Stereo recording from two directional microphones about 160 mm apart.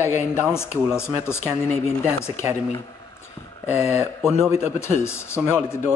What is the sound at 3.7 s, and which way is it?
Speech, 10° right (ahead or behind).